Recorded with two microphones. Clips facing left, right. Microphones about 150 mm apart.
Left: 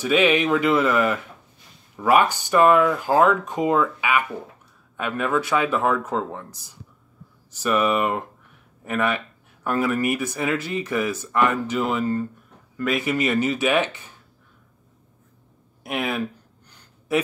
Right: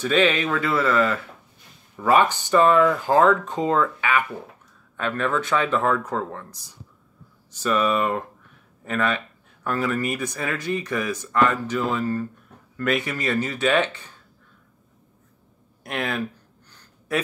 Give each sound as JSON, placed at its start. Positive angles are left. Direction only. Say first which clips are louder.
{"t": 0.0, "sound": "speech", "louder": "left 2 dB", "side_deg": 10}
{"t": 7.6, "sound": "speech", "louder": "left 1 dB", "side_deg": 15}
{"t": 12.7, "sound": "speech", "louder": "right 1 dB", "side_deg": 0}
{"t": 13.0, "sound": "speech", "louder": "left 4 dB", "side_deg": 15}
{"t": 15.8, "sound": "speech", "louder": "left 1 dB", "side_deg": 10}